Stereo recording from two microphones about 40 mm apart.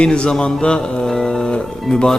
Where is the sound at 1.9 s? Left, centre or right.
Centre.